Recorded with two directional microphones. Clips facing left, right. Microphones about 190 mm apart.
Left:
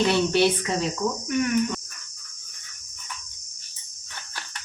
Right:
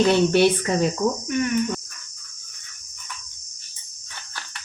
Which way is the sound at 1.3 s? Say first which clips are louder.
Right 1 dB; 5° left (ahead or behind).